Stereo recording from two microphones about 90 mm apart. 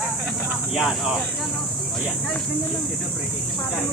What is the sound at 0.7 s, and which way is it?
Speech, centre (ahead or behind).